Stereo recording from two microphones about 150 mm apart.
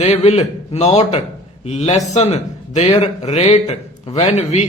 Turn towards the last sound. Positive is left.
turn(degrees=50)  # may be behind; listen again after turning